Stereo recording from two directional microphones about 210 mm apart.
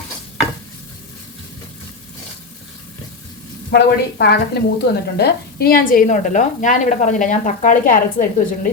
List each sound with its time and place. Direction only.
3.7 s speech: 50° left (ahead or behind)